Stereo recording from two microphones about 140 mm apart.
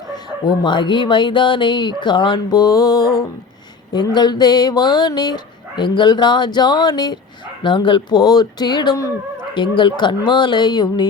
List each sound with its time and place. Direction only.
0.4 s speech: 35° left (ahead or behind)